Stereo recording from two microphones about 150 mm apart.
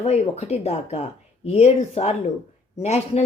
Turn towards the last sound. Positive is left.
turn(degrees=45)  # may be behind; listen again after turning